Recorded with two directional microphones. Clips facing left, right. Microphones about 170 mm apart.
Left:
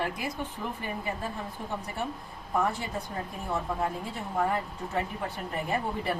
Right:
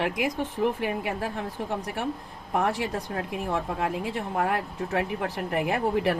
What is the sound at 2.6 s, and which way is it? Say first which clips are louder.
Speech: right 4 dB; 90° right.